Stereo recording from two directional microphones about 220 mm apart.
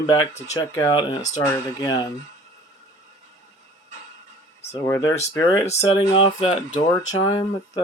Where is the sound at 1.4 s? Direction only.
15° left (ahead or behind).